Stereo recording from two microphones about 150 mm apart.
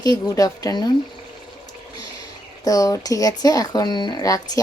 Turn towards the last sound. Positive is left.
turn(degrees=25)  # may be behind; listen again after turning